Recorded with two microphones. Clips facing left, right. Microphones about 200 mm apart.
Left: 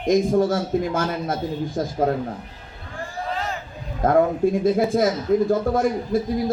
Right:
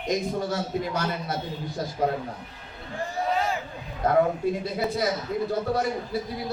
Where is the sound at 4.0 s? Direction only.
45° left (ahead or behind).